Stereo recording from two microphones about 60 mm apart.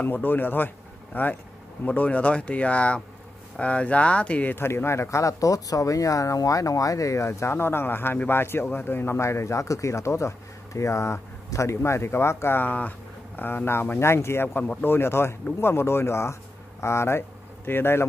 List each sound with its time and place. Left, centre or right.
0.0 s speech: left
4.6 s speech: left
12.5 s speech: left
14.6 s speech: left
14.9 s speech: left